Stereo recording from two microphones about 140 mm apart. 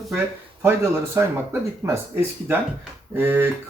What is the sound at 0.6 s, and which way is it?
Speech, 20° right (ahead or behind).